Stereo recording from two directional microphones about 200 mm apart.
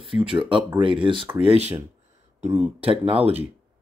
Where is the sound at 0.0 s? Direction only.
25° right (ahead or behind).